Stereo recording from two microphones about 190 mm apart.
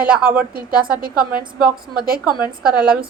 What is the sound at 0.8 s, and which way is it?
A woman's voice, 50° right (ahead or behind).